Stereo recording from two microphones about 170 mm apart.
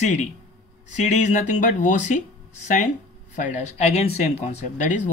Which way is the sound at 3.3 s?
45° left (ahead or behind).